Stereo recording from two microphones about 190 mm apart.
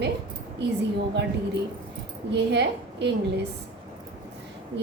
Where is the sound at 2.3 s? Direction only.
65° right (ahead or behind).